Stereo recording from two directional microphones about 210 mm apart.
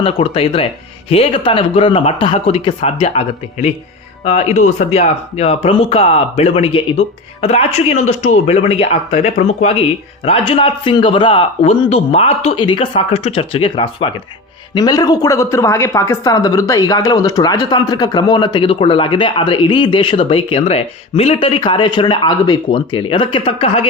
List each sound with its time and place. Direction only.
0.0 s a woman's voice: 25° left (ahead or behind)